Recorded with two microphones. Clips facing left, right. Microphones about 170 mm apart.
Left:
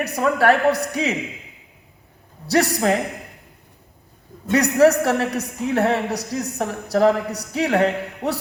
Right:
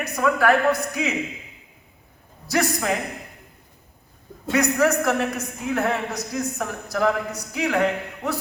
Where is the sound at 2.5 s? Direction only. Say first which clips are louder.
Left 4 dB; 35° left (ahead or behind).